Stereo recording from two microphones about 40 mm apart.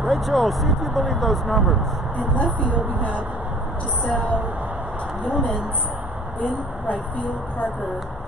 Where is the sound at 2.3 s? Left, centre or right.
Left.